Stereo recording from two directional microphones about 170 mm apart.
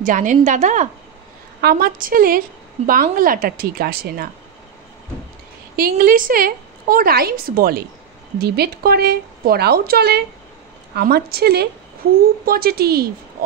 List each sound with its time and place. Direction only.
0.0 s a woman's voice: 50° right (ahead or behind)
1.6 s a woman's voice: 65° right (ahead or behind)
5.8 s a woman's voice: 60° right (ahead or behind)